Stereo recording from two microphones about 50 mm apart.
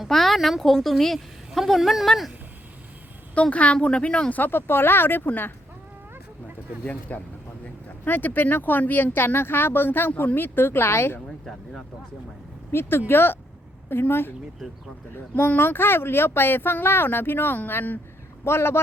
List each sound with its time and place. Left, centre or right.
0.1 s a woman's voice: centre
3.5 s speech: left
4.4 s speech: left
7.1 s speech: left
12.7 s speech: left
14.6 s a woman's voice: centre
15.4 s speech: left
18.4 s speech: left